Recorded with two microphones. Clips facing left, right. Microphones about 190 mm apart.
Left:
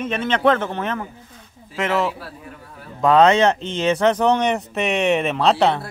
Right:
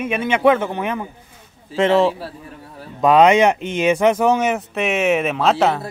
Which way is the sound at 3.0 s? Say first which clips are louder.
Right 2 dB; 15° right (ahead or behind).